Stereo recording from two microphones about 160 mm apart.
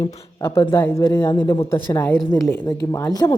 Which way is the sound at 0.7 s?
15° left (ahead or behind).